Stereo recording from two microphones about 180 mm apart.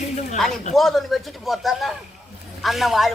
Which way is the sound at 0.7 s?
Centre (ahead or behind).